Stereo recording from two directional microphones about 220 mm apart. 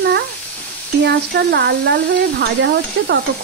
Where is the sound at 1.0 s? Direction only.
50° right (ahead or behind).